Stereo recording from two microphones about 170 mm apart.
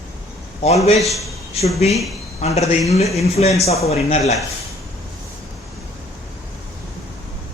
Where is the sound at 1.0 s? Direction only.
Centre (ahead or behind).